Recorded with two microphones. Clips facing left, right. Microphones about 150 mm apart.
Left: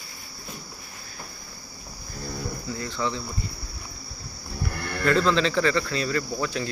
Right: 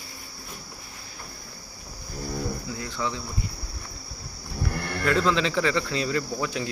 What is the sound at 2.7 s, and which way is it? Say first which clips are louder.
Cricket: left 2 dB; 5° right (ahead or behind).